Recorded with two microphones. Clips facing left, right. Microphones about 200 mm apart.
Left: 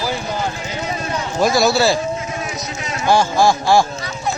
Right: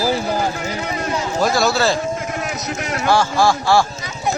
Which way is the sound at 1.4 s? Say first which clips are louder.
Left 3 dB; 15° left (ahead or behind).